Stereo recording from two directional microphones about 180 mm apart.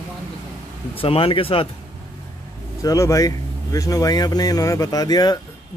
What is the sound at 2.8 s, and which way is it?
Speech, 20° left (ahead or behind).